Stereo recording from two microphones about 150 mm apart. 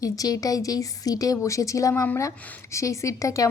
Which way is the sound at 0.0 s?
25° left (ahead or behind).